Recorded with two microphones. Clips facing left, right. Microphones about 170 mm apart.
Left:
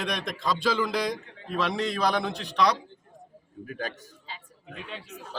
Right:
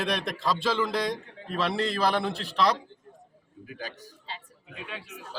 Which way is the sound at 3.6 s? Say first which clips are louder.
Left 5 dB; 50° left (ahead or behind).